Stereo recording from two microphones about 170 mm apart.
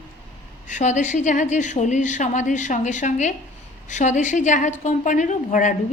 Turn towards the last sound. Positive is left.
turn(degrees=50)  # may be behind; listen again after turning